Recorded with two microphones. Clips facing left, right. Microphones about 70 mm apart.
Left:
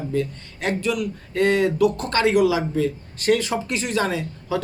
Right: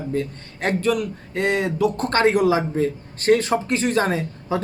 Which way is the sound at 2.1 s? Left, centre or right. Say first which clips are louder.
Right 4 dB; right.